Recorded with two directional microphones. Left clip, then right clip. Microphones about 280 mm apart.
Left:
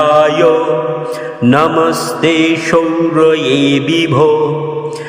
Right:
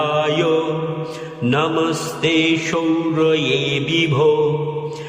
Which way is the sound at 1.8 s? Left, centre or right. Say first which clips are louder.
Left 7 dB; centre.